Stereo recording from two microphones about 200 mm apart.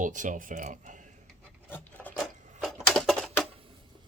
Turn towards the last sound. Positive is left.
turn(degrees=0)  # may be behind; listen again after turning